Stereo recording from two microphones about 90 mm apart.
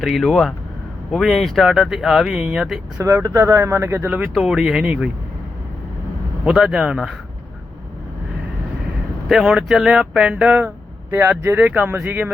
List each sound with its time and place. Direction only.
0.0 s speech: centre (ahead or behind)
3.0 s speech: 30° right (ahead or behind); by 5.1 s 10° right (ahead or behind)
6.4 s speech: 5° right (ahead or behind)
9.3 s speech: 5° right (ahead or behind)
11.1 s speech: 25° right (ahead or behind)